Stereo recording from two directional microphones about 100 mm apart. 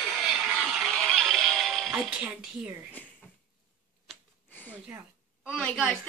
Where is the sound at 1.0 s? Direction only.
5° left (ahead or behind).